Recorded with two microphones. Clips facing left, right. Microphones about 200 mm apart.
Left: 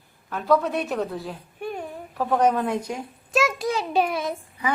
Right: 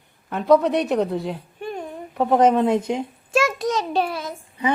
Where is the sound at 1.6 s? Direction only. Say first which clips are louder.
Right 1 dB; 10° left (ahead or behind).